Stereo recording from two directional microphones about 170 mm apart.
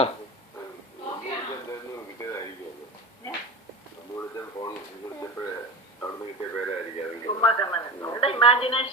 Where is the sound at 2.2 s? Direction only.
15° left (ahead or behind).